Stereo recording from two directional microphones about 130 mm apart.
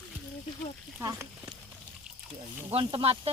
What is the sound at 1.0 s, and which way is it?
Speech, 25° right (ahead or behind).